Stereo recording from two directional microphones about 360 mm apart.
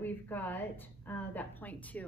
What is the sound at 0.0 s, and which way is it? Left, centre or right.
A woman's voice, centre.